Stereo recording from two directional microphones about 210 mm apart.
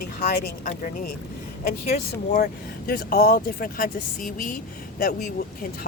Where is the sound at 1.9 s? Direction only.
40° left (ahead or behind).